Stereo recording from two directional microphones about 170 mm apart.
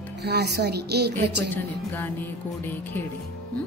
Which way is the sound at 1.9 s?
10° left (ahead or behind).